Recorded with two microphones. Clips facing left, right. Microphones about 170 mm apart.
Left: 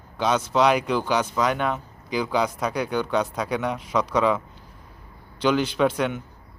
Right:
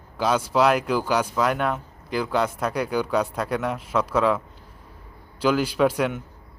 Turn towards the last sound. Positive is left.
turn(degrees=-5)  # may be behind; listen again after turning